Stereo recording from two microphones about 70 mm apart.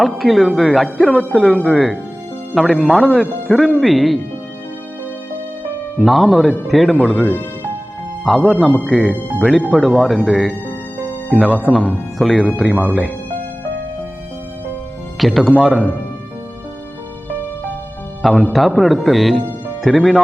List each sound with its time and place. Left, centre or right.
0.2 s speech: centre
6.1 s speech: centre
6.9 s speech: centre
8.2 s speech: centre
15.2 s speech: centre
18.2 s a man's voice: centre
20.0 s speech: centre